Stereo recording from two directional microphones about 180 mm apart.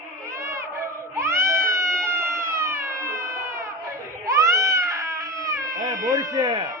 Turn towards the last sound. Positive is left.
turn(degrees=-20)  # may be behind; listen again after turning